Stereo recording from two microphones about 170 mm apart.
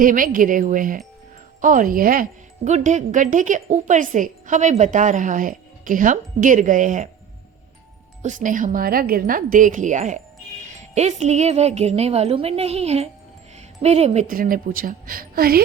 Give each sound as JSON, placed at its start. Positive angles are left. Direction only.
{"t": 0.0, "sound": "a woman's voice", "side_deg": -50}
{"t": 2.6, "sound": "a woman's voice", "side_deg": -45}
{"t": 8.2, "sound": "a woman's voice", "side_deg": -50}
{"t": 14.3, "sound": "a woman's voice", "side_deg": -55}